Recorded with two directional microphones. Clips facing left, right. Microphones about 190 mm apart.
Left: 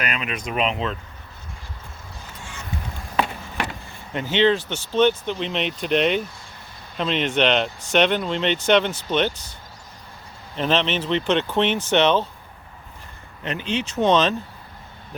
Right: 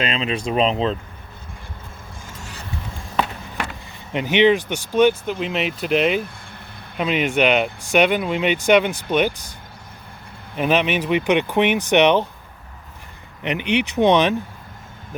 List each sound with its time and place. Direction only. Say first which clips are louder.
0.0 s speech: right 5 dB; 25° right (ahead or behind)
2.2 s vehicle: right 1 dB; 40° right (ahead or behind)
4.1 s speech: right 3 dB; 15° right (ahead or behind)
10.6 s speech: right 3 dB; 10° right (ahead or behind)
13.4 s speech: right 5 dB; 15° right (ahead or behind)